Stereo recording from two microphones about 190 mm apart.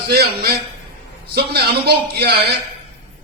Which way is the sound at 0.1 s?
55° right (ahead or behind).